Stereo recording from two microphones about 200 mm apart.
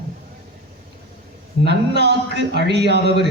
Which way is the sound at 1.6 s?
55° right (ahead or behind).